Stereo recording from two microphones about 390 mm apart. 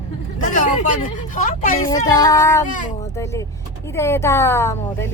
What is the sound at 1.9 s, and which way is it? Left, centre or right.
A woman's voice, centre.